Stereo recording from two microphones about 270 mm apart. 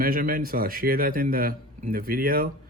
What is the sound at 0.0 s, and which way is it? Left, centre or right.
A man's voice, right.